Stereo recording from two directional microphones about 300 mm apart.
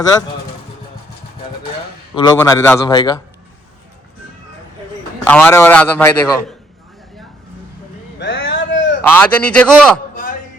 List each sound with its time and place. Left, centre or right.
2.1 s a man's voice: centre
5.2 s a man's voice: centre
8.2 s a sound: left
9.0 s a man's voice: centre